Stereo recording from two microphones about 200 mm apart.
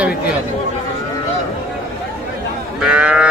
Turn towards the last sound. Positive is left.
turn(degrees=-5)  # may be behind; listen again after turning